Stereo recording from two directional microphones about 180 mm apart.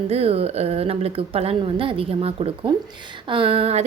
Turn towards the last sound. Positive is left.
turn(degrees=-30)  # may be behind; listen again after turning